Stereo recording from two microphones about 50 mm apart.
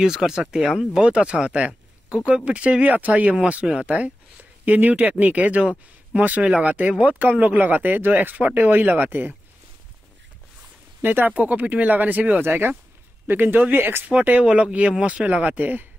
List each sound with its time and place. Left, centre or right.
0.0 s speech: centre
1.0 s speech: right
11.0 s speech: right
12.4 s speech: right
14.0 s speech: right
14.4 s speech: right